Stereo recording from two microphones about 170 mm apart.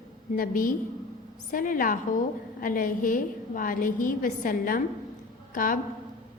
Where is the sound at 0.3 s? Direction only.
55° left (ahead or behind).